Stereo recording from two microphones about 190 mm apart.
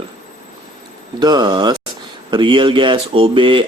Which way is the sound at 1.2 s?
20° right (ahead or behind).